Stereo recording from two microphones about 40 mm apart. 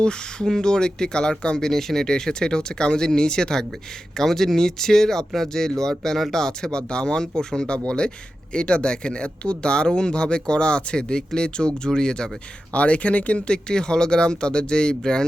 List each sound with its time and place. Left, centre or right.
0.0 s speech: left
1.6 s speech: centre
12.7 s speech: left